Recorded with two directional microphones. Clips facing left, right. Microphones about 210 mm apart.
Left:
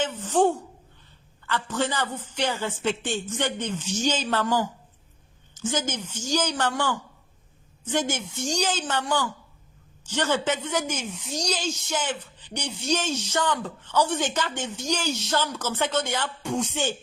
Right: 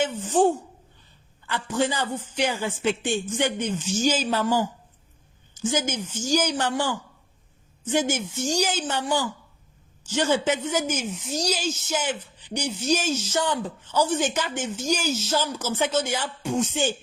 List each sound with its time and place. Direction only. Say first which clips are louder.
0.0 s speech: right 1 dB; 10° right (ahead or behind)